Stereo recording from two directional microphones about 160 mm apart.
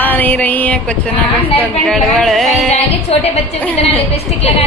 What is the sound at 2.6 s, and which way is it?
Speech, 40° left (ahead or behind).